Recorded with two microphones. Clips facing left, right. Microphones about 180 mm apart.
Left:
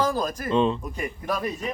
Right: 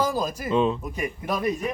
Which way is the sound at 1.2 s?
15° right (ahead or behind).